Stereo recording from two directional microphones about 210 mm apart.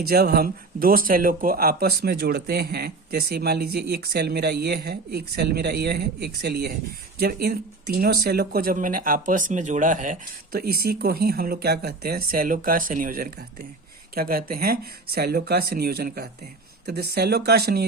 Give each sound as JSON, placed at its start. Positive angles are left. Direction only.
{"t": 0.1, "sound": "speech", "side_deg": -45}